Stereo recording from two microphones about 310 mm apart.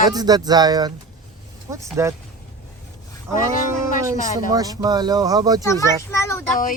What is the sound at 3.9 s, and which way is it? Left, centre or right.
Speech, left.